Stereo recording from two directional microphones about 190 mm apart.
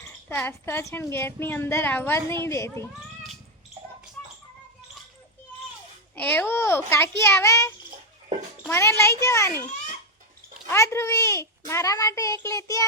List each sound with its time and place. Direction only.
0.3 s a woman's voice: 10° left (ahead or behind)
6.1 s a woman's voice: 10° left (ahead or behind)
10.7 s a woman's voice: 15° left (ahead or behind)